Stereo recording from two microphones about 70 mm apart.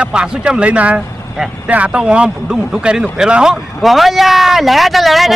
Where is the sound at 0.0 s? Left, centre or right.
Centre.